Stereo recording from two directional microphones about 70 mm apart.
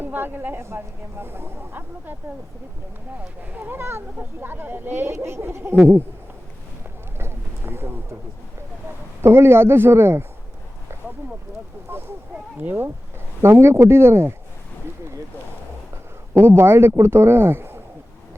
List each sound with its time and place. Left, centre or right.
0.0 s speech: right
3.2 s speech: right
7.2 s a sound: right
9.2 s speech: right
11.9 s a sound: right
12.5 s speech: right
13.4 s speech: right
16.3 s speech: right